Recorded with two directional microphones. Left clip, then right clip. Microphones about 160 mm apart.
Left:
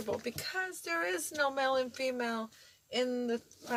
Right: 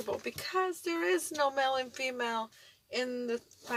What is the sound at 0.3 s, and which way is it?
Speech, 40° right (ahead or behind).